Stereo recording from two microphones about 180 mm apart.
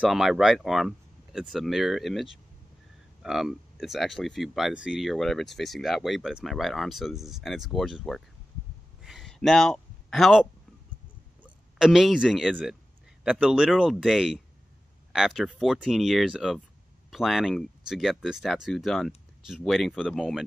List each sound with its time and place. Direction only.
0.0 s speech: centre (ahead or behind)
9.0 s a sound: centre (ahead or behind)
11.4 s speech: centre (ahead or behind)